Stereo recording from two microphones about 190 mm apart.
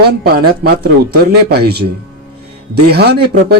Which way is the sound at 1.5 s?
55° right (ahead or behind).